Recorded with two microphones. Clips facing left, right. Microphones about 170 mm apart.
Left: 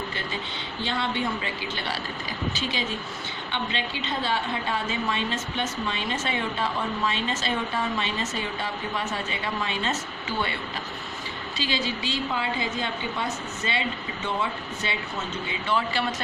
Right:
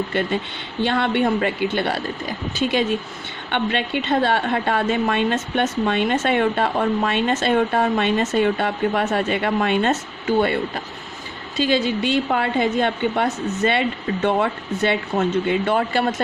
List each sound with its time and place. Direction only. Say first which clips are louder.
0.1 s a woman's voice: right 10 dB; 60° right (ahead or behind)